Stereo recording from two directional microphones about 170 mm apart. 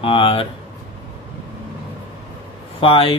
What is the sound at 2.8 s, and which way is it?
Speech, 35° left (ahead or behind).